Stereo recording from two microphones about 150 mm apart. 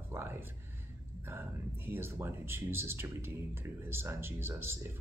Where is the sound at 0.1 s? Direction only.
15° right (ahead or behind).